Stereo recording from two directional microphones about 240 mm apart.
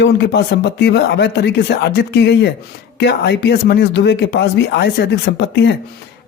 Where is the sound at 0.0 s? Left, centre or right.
Left.